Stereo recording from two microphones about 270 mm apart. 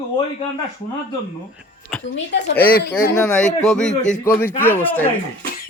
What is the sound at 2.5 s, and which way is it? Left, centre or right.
Speech, centre.